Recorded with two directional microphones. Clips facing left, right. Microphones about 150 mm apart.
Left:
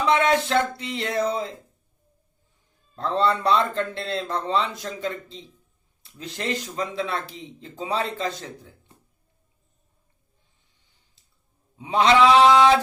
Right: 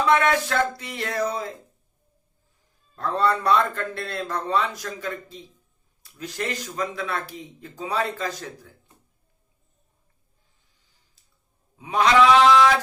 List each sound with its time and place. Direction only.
0.1 s speech: 20° left (ahead or behind)
2.9 s speech: 25° left (ahead or behind)
11.8 s speech: 25° left (ahead or behind)